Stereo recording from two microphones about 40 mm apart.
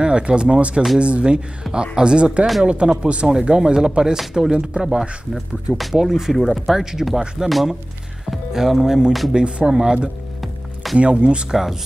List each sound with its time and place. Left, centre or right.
0.0 s speech: right
8.3 s speech: centre
9.3 s speech: right
10.4 s music: centre
11.0 s speech: right
11.5 s speech: centre